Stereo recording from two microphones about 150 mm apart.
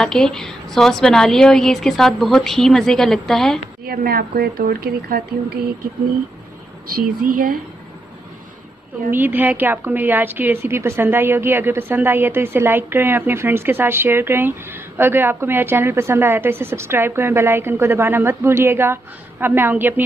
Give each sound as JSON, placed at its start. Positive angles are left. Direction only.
{"t": 0.0, "sound": "a woman's voice", "side_deg": 5}
{"t": 3.8, "sound": "speech", "side_deg": -90}
{"t": 7.0, "sound": "speech", "side_deg": -65}
{"t": 9.1, "sound": "a woman's voice", "side_deg": -10}